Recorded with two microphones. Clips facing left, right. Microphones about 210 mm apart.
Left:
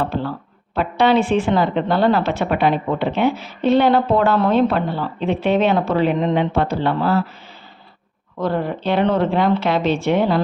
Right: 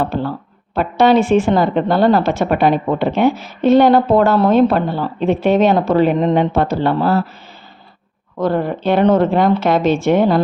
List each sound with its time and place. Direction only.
0.0 s a woman's voice: 45° right (ahead or behind)
8.4 s a woman's voice: 45° right (ahead or behind)